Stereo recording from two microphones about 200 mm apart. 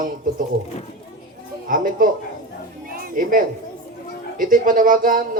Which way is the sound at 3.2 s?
45° right (ahead or behind).